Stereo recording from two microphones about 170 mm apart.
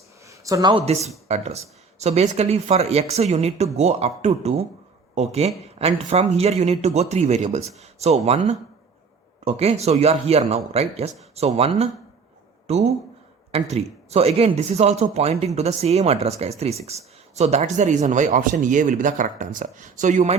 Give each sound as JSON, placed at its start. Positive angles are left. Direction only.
{"t": 0.3, "sound": "speech", "side_deg": -20}